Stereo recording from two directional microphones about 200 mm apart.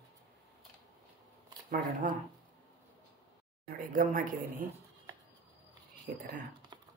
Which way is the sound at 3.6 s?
40° right (ahead or behind).